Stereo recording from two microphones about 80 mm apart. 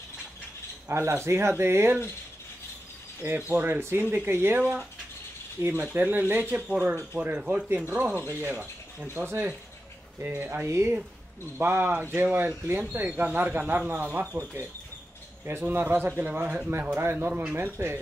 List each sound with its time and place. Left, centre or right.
0.8 s speech: right
3.3 s speech: right
5.9 s speech: right
17.3 s speech: centre
17.7 s speech: right